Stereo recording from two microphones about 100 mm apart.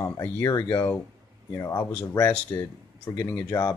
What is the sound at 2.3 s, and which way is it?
Speech, 15° left (ahead or behind).